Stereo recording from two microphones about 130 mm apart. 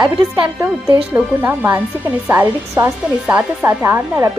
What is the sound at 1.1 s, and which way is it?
Speech, 15° right (ahead or behind).